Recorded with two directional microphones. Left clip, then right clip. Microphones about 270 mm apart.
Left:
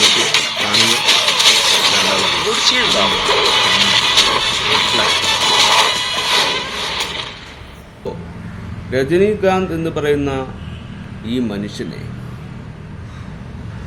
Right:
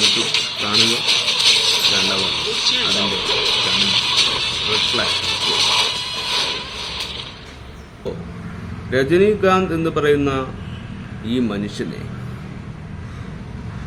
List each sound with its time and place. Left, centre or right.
0.0 s a sound: left
2.2 s vehicle: left
3.0 s speech: left
5.0 s music: left
8.9 s a man's voice: centre